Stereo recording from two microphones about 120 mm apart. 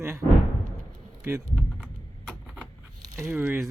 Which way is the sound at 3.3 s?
15° right (ahead or behind).